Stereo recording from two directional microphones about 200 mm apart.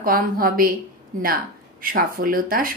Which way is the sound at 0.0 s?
45° right (ahead or behind).